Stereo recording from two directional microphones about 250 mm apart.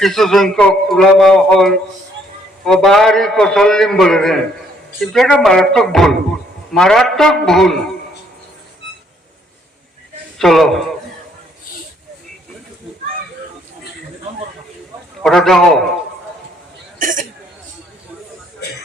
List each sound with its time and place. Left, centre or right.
0.0 s speech: centre
10.3 s speech: centre
15.2 s speech: centre
17.0 s a sound: right